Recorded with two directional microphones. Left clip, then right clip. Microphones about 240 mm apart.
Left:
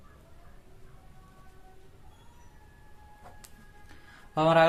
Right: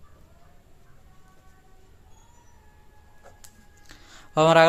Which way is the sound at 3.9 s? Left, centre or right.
Right.